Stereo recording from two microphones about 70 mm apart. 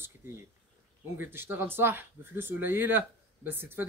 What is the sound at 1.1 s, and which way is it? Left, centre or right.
Speech, right.